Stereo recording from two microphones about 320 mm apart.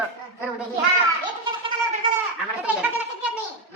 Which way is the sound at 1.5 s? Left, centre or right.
Centre.